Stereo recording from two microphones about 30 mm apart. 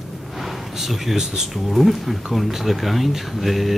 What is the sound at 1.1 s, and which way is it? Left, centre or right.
Speech, centre.